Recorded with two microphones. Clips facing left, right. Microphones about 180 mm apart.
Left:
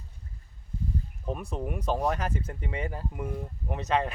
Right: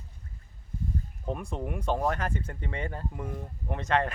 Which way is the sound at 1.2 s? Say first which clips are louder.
Even; 5° left (ahead or behind).